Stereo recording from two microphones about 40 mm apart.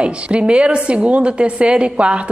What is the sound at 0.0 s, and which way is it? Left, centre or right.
A woman's voice, right.